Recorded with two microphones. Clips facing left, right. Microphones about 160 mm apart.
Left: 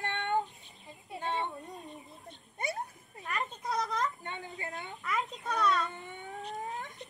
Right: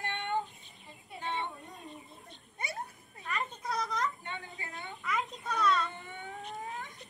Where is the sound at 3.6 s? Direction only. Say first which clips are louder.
Left 3 dB; centre (ahead or behind).